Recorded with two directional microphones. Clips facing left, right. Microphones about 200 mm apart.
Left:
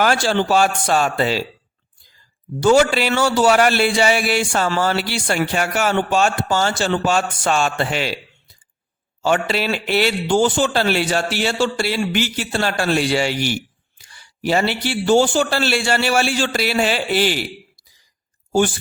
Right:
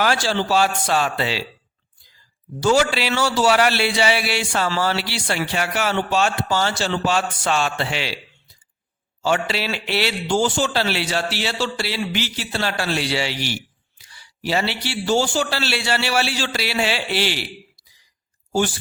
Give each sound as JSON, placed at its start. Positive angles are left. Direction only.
{"t": 0.0, "sound": "a man's voice", "side_deg": 50}
{"t": 2.6, "sound": "a man's voice", "side_deg": 50}
{"t": 9.2, "sound": "a man's voice", "side_deg": 50}